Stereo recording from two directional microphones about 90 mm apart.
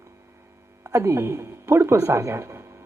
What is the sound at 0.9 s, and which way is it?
A woman's voice, 30° right (ahead or behind).